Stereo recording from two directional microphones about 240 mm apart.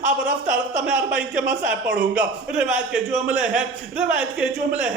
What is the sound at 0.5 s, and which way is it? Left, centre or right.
Speech, right.